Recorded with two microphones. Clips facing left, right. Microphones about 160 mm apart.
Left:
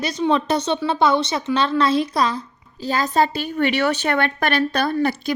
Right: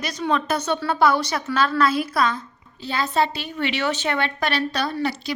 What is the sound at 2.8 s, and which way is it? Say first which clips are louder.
Speech: left 3 dB; 45° left (ahead or behind).